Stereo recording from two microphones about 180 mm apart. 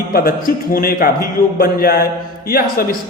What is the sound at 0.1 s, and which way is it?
A man's voice, 55° left (ahead or behind).